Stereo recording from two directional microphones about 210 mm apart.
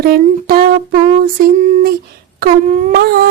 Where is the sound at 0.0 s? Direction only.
45° right (ahead or behind).